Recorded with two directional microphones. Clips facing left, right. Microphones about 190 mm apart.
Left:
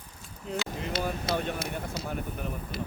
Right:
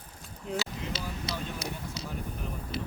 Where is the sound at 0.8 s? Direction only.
55° left (ahead or behind).